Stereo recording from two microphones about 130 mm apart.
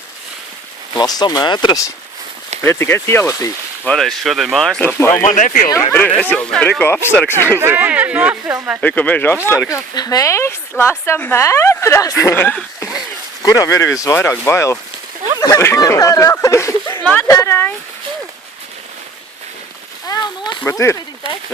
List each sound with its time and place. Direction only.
0.9 s speech: 30° left (ahead or behind)
2.6 s speech: 20° left (ahead or behind)
3.8 s speech: 5° left (ahead or behind)
4.8 s speech: 15° left (ahead or behind)
5.2 s speech: 70° left (ahead or behind)
5.9 s speech: 10° left (ahead or behind)
7.6 s speech: 15° right (ahead or behind)
8.8 s speech: 10° left (ahead or behind)
17.0 s speech: 10° left (ahead or behind)
17.2 s speech: 20° left (ahead or behind)
20.1 s a sound: 35° left (ahead or behind)
20.7 s speech: 20° left (ahead or behind)